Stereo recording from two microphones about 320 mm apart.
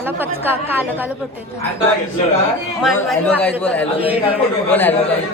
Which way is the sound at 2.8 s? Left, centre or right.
Centre.